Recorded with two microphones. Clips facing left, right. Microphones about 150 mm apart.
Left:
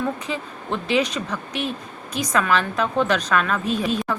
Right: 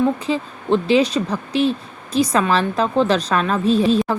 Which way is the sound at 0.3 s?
30° right (ahead or behind).